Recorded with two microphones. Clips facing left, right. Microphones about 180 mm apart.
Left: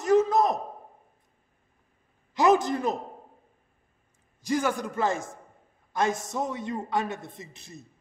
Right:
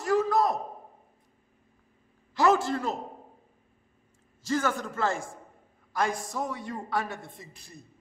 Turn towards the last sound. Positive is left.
turn(degrees=20)  # may be behind; listen again after turning